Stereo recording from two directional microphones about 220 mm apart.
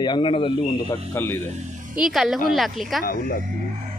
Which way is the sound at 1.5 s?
35° right (ahead or behind).